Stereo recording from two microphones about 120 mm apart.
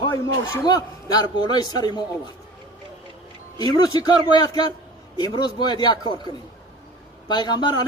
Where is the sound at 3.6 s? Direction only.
35° left (ahead or behind).